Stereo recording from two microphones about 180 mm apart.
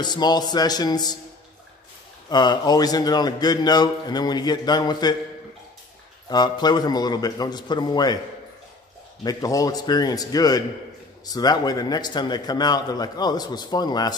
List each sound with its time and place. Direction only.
0.0 s a man's voice: 25° left (ahead or behind)
2.2 s a man's voice: 25° left (ahead or behind)
6.2 s a man's voice: 25° left (ahead or behind)
9.2 s a man's voice: 20° left (ahead or behind)